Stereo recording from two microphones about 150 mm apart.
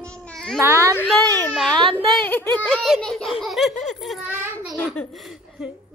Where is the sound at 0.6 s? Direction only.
15° right (ahead or behind).